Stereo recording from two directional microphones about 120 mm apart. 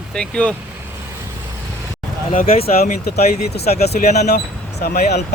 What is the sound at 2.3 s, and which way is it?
Speech, 55° left (ahead or behind).